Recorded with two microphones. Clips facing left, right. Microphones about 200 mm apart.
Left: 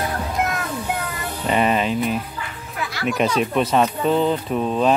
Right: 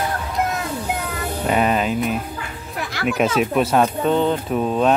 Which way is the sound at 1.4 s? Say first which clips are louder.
Even; centre (ahead or behind).